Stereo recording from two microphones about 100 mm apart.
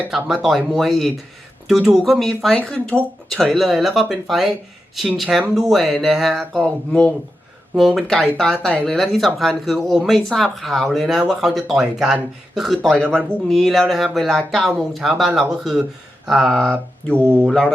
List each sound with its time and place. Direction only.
0.1 s speech: 5° right (ahead or behind)
6.6 s speech: 10° left (ahead or behind)
16.7 s a sound: 20° right (ahead or behind)
17.4 s speech: 10° left (ahead or behind)